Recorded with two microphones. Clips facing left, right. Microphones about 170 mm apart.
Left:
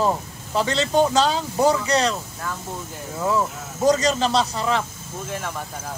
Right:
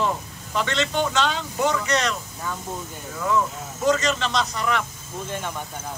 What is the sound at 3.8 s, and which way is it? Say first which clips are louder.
Speech: left 3 dB; 35° left (ahead or behind).